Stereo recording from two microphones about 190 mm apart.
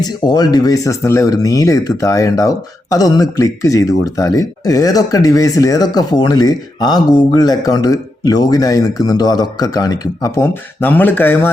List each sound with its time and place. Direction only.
0.0 s speech: 20° left (ahead or behind)